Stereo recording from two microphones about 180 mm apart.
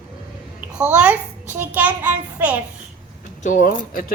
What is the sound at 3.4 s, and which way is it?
Speech, 45° left (ahead or behind).